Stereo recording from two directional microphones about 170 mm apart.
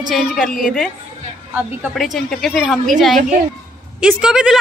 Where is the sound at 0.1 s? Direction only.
Centre (ahead or behind).